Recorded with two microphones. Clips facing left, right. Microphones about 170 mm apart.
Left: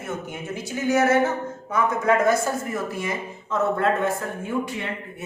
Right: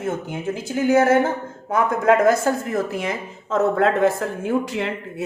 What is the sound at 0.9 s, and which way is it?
Speech, 50° right (ahead or behind).